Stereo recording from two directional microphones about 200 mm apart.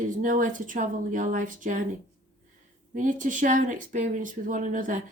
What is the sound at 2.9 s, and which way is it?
Speech, 40° right (ahead or behind).